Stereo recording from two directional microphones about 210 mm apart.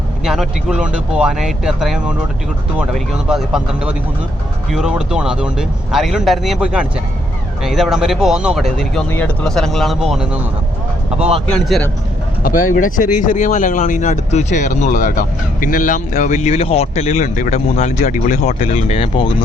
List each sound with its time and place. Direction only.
0.3 s speech: 5° right (ahead or behind)
11.4 s a man's voice: 5° left (ahead or behind)
12.4 s speech: 40° left (ahead or behind)